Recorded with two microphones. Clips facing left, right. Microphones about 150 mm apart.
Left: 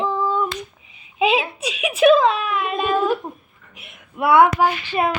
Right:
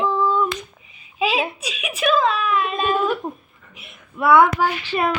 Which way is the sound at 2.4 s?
70° left (ahead or behind).